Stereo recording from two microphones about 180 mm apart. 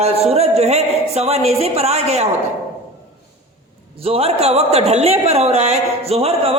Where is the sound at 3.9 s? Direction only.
35° right (ahead or behind).